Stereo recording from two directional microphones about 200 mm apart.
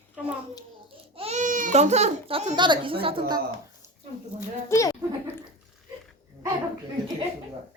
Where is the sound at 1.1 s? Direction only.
35° right (ahead or behind).